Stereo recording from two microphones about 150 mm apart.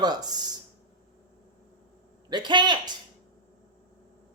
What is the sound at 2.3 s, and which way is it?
Speech, 30° right (ahead or behind).